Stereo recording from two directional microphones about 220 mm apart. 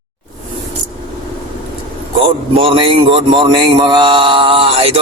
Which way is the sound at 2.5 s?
25° right (ahead or behind).